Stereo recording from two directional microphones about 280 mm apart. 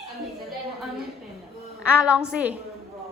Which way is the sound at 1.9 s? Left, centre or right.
Centre.